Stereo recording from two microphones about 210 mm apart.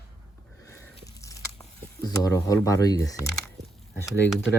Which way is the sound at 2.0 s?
15° left (ahead or behind).